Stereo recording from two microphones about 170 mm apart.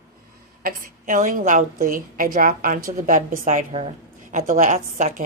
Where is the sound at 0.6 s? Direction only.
50° right (ahead or behind).